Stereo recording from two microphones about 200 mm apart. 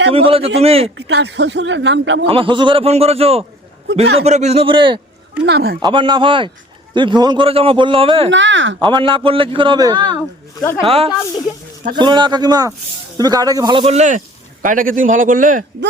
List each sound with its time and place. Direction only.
0.1 s a man's voice: 30° right (ahead or behind)
0.9 s speech: 55° right (ahead or behind)
2.2 s a man's voice: 25° right (ahead or behind)
5.5 s speech: 55° right (ahead or behind)
5.8 s a man's voice: 25° right (ahead or behind)
8.3 s speech: 65° right (ahead or behind)
8.8 s a man's voice: 25° right (ahead or behind); by 15.6 s 40° right (ahead or behind)